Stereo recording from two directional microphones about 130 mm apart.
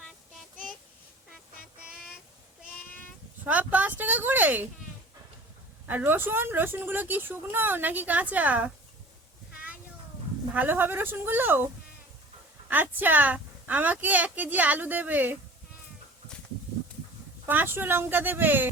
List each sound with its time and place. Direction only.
1.8 s a sound: 5° right (ahead or behind)
3.4 s a sound: 15° right (ahead or behind)
5.9 s speech: 15° right (ahead or behind)
10.5 s speech: 15° right (ahead or behind)
12.7 s speech: 15° right (ahead or behind)
17.4 s speech: 15° right (ahead or behind)